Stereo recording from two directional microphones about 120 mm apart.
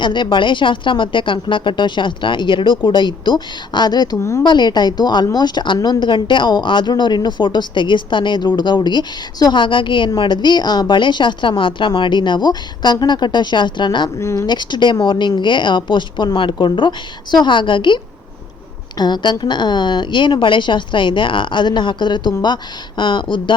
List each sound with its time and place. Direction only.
0.0 s a woman's voice: 40° left (ahead or behind)
4.2 s speech: 25° left (ahead or behind)
4.4 s a woman's voice: 35° left (ahead or behind)
14.2 s speech: 25° left (ahead or behind)
14.4 s a woman's voice: 40° left (ahead or behind)